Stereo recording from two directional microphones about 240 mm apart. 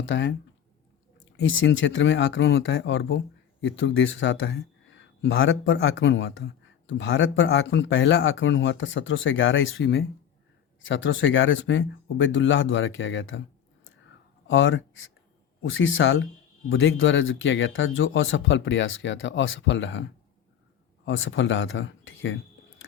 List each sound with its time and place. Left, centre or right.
0.0 s speech: left
1.4 s speech: left
14.4 s speech: left